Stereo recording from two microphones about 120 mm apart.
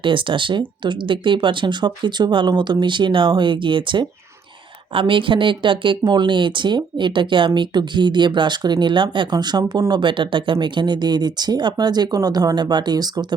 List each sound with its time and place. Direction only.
0.0 s speech: 45° right (ahead or behind)